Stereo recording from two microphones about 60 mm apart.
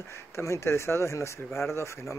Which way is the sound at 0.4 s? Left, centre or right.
Left.